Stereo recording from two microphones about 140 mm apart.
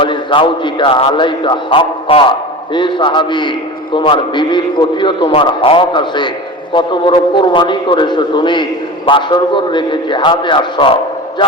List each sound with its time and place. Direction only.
0.0 s a man's voice: 35° left (ahead or behind)